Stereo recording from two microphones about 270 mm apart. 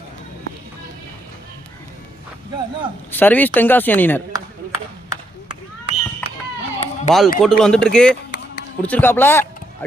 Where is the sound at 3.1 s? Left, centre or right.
Centre.